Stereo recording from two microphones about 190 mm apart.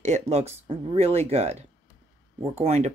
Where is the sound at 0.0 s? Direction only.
35° right (ahead or behind).